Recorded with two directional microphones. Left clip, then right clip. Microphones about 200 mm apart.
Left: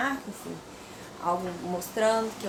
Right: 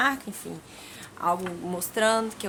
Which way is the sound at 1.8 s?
15° right (ahead or behind).